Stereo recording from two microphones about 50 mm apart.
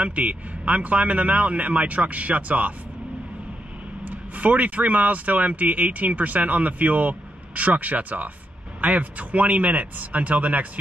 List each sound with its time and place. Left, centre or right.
0.0 s speech: right
4.0 s speech: right